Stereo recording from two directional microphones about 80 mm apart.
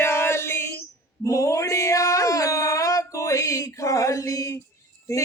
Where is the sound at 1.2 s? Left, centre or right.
Left.